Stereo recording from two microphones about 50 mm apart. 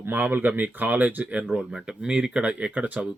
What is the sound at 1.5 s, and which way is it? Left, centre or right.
Speech, centre.